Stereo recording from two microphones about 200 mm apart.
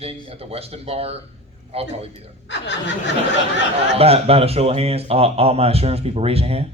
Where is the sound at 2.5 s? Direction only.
65° left (ahead or behind).